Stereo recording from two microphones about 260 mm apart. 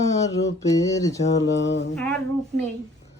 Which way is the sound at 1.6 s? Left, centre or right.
Left.